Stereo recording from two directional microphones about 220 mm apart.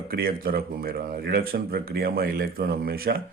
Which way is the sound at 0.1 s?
40° right (ahead or behind).